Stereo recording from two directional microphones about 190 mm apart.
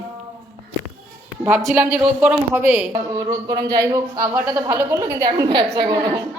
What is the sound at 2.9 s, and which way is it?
A woman's voice, 20° right (ahead or behind).